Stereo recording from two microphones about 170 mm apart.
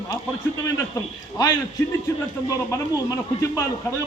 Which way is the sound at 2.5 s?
20° left (ahead or behind).